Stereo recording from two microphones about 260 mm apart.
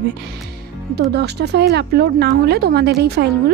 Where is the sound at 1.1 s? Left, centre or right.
Right.